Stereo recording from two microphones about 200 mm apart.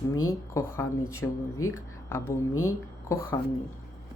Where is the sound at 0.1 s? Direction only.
15° left (ahead or behind).